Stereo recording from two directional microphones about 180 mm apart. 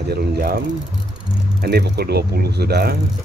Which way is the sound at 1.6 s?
65° right (ahead or behind).